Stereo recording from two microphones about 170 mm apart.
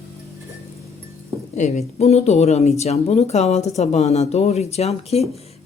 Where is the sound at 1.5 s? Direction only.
45° left (ahead or behind).